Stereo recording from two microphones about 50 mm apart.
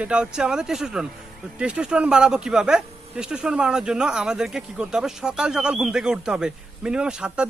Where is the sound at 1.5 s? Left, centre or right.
Right.